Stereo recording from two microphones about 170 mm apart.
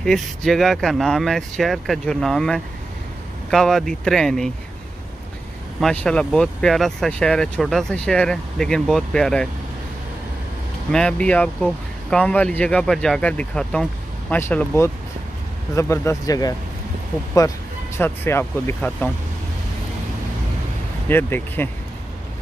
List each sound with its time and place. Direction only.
0.0 s speech: centre (ahead or behind)
5.8 s speech: 5° left (ahead or behind)
10.9 s speech: 5° left (ahead or behind); by 16.5 s 20° left (ahead or behind)
17.9 s speech: 15° left (ahead or behind)
21.1 s speech: 10° left (ahead or behind)